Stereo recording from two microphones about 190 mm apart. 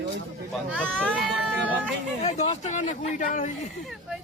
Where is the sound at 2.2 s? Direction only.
35° left (ahead or behind).